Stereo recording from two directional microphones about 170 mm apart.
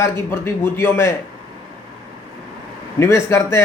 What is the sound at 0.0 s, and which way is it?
A man's voice, 15° left (ahead or behind).